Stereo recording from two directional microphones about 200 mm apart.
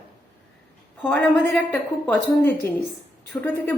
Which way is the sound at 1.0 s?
5° left (ahead or behind).